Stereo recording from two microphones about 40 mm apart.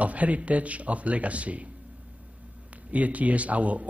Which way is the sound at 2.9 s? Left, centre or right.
Right.